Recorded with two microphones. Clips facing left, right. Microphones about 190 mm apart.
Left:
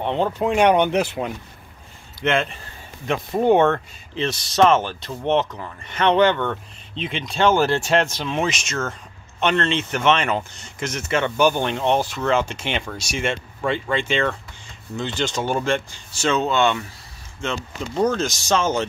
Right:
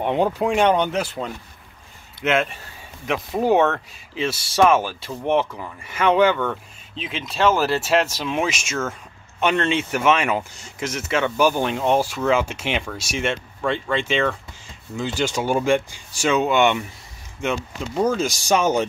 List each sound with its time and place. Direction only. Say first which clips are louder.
0.0 s speech: right 1 dB; 10° right (ahead or behind)
0.7 s speech: left 2 dB; 15° left (ahead or behind)
2.2 s speech: even; 5° right (ahead or behind)